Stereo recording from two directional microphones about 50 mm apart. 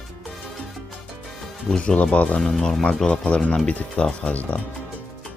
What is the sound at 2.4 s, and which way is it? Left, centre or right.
Speech, centre.